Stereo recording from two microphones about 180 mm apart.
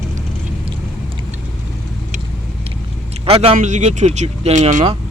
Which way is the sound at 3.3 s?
35° right (ahead or behind).